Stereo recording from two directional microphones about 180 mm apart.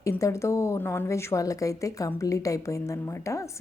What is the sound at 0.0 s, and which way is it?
A woman's voice, 15° left (ahead or behind).